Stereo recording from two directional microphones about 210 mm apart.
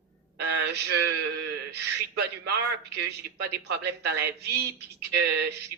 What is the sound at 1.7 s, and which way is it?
A man's voice, 55° right (ahead or behind).